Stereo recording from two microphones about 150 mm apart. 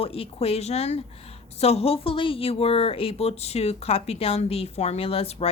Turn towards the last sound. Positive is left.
turn(degrees=40)  # may be behind; listen again after turning